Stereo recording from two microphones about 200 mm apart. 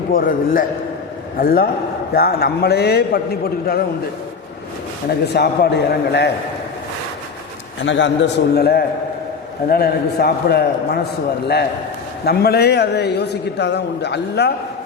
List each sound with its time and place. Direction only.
0.1 s a man's voice: 45° left (ahead or behind)
5.0 s a man's voice: 55° left (ahead or behind)
7.8 s a man's voice: 65° left (ahead or behind)
12.2 s a man's voice: 50° left (ahead or behind)